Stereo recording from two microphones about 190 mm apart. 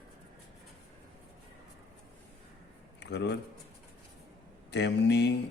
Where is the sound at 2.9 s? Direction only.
65° left (ahead or behind).